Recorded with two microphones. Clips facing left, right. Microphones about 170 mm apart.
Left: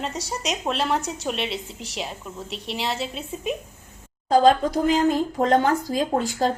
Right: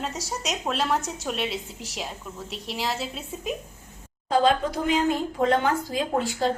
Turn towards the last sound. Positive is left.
turn(degrees=40)  # may be behind; listen again after turning